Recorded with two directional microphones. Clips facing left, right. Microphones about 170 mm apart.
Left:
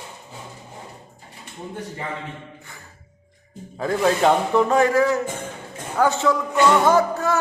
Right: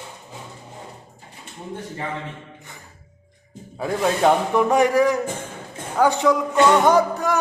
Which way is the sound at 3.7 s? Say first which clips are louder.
Left 2 dB; 10° right (ahead or behind).